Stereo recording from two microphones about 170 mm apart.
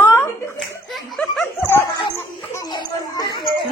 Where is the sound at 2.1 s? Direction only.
15° left (ahead or behind).